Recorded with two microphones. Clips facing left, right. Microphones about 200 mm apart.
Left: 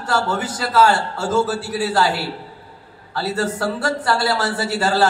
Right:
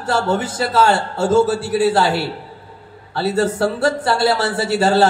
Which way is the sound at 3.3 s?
25° right (ahead or behind).